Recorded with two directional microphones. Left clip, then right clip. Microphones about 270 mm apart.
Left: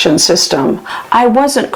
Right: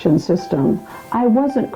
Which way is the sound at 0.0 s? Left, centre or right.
Centre.